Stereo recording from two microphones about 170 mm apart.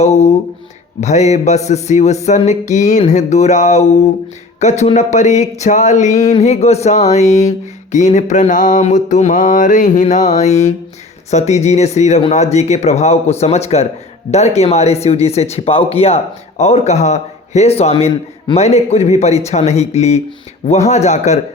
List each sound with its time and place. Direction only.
0.0 s speech: 40° left (ahead or behind)
1.0 s mantra: 40° left (ahead or behind)
4.6 s speech: 40° left (ahead or behind)
7.9 s mantra: 45° left (ahead or behind)
11.3 s speech: 40° left (ahead or behind)